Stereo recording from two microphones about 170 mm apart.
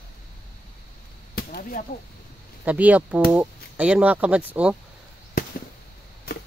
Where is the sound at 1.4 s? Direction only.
60° left (ahead or behind).